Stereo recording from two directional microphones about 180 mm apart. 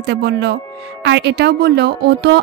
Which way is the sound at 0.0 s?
70° right (ahead or behind).